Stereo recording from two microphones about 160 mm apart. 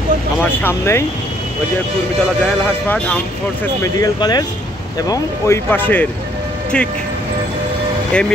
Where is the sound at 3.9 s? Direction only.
25° left (ahead or behind); by 6.9 s 5° left (ahead or behind).